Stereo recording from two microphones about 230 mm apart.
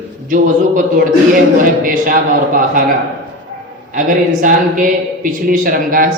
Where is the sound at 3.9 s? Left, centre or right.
Right.